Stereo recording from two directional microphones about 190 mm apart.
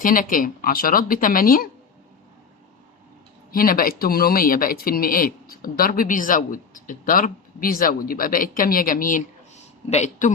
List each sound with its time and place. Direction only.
0.0 s speech: 45° left (ahead or behind)
3.5 s a man's voice: 50° left (ahead or behind)